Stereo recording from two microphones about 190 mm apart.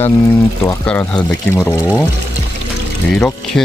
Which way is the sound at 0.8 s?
5° left (ahead or behind).